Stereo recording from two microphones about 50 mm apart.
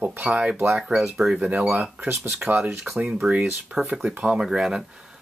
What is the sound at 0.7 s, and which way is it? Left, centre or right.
Speech, centre.